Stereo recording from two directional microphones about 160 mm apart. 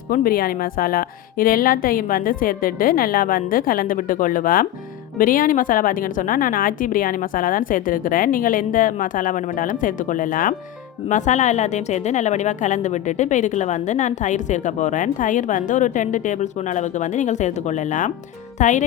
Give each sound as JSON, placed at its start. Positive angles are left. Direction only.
{"t": 0.1, "sound": "a woman's voice", "side_deg": 65}